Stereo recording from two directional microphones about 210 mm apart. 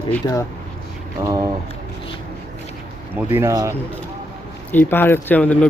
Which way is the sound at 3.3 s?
15° right (ahead or behind).